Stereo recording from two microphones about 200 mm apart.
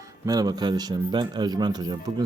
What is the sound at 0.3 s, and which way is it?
A man's voice, 20° right (ahead or behind).